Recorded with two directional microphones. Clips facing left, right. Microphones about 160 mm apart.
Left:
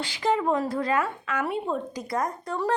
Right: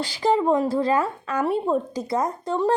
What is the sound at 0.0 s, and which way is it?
A woman's voice, 35° right (ahead or behind).